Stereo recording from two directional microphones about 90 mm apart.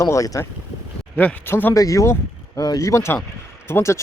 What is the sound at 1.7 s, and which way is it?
Speech, 40° left (ahead or behind).